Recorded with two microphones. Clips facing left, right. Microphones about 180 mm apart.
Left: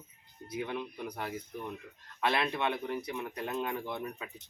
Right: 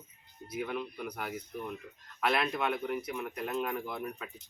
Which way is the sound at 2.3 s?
25° left (ahead or behind).